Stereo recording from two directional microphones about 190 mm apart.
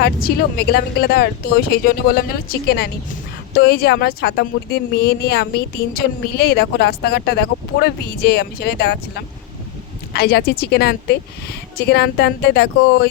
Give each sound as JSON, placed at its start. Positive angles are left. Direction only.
{"t": 0.0, "sound": "speech", "side_deg": 55}